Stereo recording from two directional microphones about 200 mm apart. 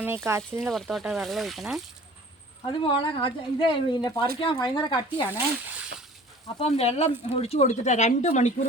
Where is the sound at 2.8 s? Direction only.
25° left (ahead or behind).